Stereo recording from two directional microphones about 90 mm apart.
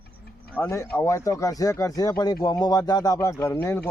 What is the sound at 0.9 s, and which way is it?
Speech, 30° left (ahead or behind).